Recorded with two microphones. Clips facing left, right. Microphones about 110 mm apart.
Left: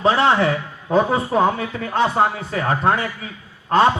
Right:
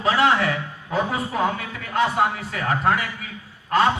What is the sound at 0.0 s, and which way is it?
A man's voice, 30° left (ahead or behind).